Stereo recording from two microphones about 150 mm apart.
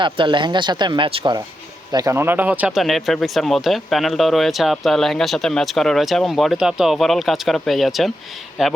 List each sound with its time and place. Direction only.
0.0 s speech: 30° right (ahead or behind); by 8.7 s 5° right (ahead or behind)